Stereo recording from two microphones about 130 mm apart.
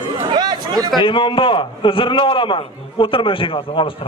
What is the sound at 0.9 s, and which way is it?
A man's voice, 40° left (ahead or behind).